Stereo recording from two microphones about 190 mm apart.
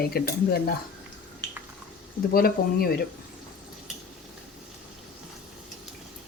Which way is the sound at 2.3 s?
50° left (ahead or behind).